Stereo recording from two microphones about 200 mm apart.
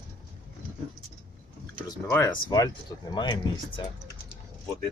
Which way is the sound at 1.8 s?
15° left (ahead or behind).